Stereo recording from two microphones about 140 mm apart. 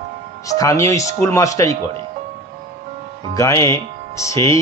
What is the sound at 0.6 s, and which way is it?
Speech, 25° left (ahead or behind).